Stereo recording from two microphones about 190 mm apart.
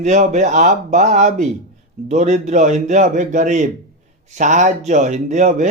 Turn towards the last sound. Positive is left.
turn(degrees=-40)  # may be behind; listen again after turning